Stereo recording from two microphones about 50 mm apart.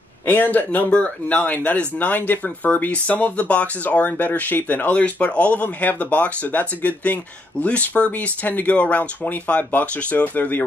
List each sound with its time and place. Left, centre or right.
0.3 s speech: left
0.8 s speech: left
4.9 s speech: left